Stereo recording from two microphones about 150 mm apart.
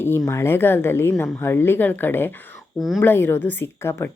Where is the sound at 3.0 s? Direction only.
15° left (ahead or behind).